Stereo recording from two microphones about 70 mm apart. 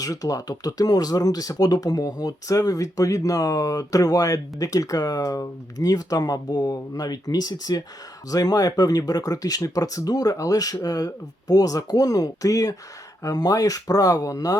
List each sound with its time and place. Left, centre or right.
0.0 s speech: left